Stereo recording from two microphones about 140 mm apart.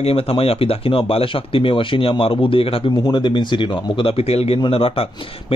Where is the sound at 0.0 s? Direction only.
45° left (ahead or behind).